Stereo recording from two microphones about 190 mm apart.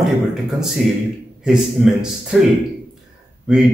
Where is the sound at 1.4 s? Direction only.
5° right (ahead or behind).